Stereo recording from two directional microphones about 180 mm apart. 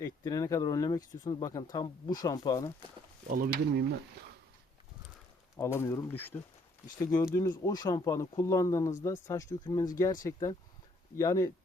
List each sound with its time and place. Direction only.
0.0 s speech: 20° left (ahead or behind)
3.2 s speech: 55° right (ahead or behind)
5.5 s speech: 15° left (ahead or behind)